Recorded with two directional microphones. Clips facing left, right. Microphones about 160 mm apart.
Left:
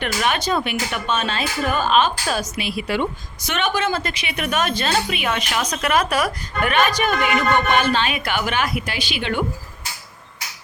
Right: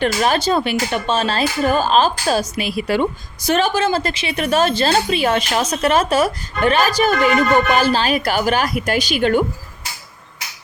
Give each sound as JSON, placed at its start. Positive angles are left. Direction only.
{"t": 0.0, "sound": "speech", "side_deg": -35}